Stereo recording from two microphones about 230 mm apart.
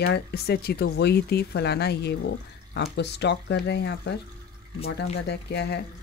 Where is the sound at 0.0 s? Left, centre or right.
Left.